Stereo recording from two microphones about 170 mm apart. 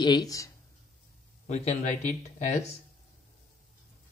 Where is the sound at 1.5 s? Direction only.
40° left (ahead or behind).